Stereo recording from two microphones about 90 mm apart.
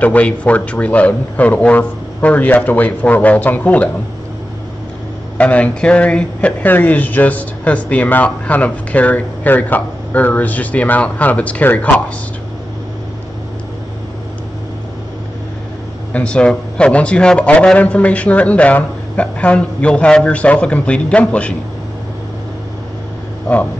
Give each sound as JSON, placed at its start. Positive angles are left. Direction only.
{"t": 0.0, "sound": "speech", "side_deg": 15}
{"t": 5.4, "sound": "speech", "side_deg": 15}
{"t": 16.1, "sound": "speech", "side_deg": 15}